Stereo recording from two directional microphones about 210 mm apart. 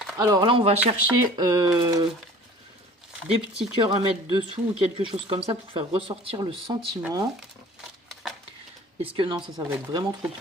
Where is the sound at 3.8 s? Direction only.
25° right (ahead or behind).